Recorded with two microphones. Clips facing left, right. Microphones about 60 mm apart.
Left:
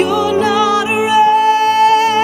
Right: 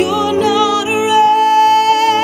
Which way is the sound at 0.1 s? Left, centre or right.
Left.